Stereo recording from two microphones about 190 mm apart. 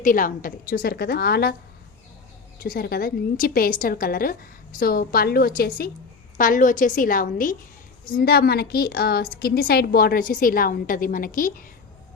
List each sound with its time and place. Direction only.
0.0 s a woman's voice: 45° left (ahead or behind)
2.6 s a woman's voice: 50° left (ahead or behind)